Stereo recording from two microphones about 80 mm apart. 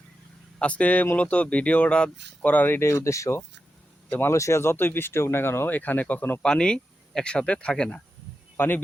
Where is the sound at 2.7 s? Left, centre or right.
Left.